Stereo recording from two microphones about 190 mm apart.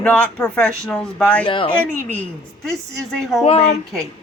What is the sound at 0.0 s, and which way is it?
Speech, 5° left (ahead or behind).